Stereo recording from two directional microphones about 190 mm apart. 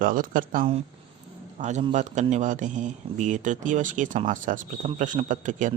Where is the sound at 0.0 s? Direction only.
45° right (ahead or behind).